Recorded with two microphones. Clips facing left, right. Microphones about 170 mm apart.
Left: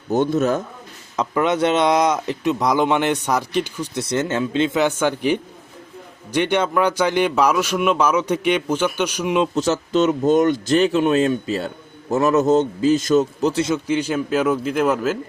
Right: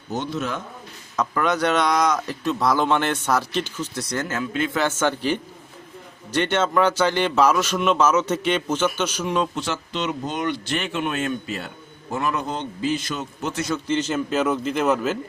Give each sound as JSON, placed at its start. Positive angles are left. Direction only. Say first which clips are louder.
{"t": 0.1, "sound": "a man's voice", "louder": "left 9 dB", "side_deg": 50}
{"t": 1.1, "sound": "speech", "louder": "left 3 dB", "side_deg": 25}
{"t": 4.0, "sound": "a man's voice", "louder": "left 7 dB", "side_deg": 25}
{"t": 9.6, "sound": "speech", "louder": "left 9 dB", "side_deg": 40}
{"t": 13.7, "sound": "a man's voice", "louder": "left 3 dB", "side_deg": 15}